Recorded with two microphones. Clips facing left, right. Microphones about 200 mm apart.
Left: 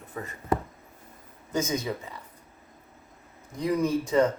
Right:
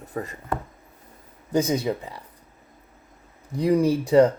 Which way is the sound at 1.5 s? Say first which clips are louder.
Right 6 dB; 35° right (ahead or behind).